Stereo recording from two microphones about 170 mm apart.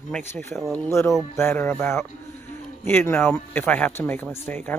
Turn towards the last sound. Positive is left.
turn(degrees=10)  # may be behind; listen again after turning